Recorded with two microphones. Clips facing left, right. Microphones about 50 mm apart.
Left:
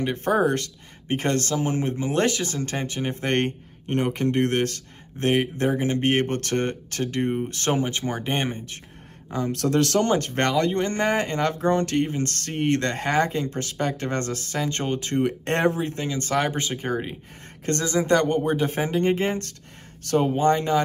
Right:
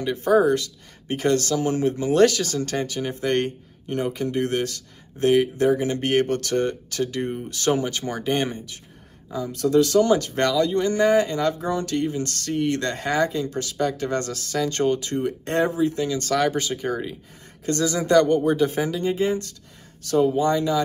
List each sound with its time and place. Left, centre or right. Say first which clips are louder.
0.0 s speech: right 3 dB; left
7.7 s speech: even; left
9.3 s speech: right 2 dB; left
10.1 s speech: right 1 dB; left
16.1 s speech: right 2 dB; left